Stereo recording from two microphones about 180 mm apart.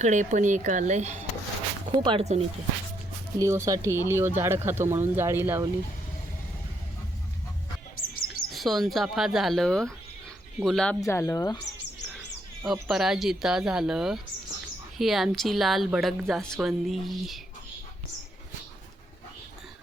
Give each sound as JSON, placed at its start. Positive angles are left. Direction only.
{"t": 0.0, "sound": "speech", "side_deg": -45}
{"t": 1.9, "sound": "speech", "side_deg": -30}
{"t": 3.3, "sound": "speech", "side_deg": -15}
{"t": 8.3, "sound": "a woman's voice", "side_deg": 0}
{"t": 11.0, "sound": "speech", "side_deg": 15}
{"t": 12.6, "sound": "a woman's voice", "side_deg": 0}